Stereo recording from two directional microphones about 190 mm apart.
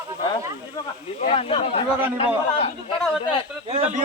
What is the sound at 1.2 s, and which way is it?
Speech, 30° left (ahead or behind).